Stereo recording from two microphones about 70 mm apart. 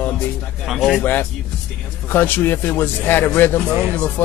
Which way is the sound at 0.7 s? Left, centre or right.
Centre.